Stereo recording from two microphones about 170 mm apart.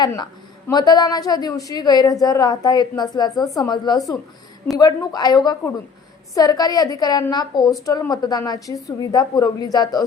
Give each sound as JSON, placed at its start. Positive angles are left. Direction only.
{"t": 0.0, "sound": "a woman's voice", "side_deg": 25}